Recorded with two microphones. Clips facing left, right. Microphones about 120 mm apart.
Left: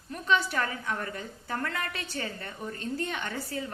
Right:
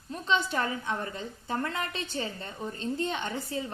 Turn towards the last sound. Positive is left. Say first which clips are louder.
# right 1 dB
turn(degrees=-20)  # may be behind; listen again after turning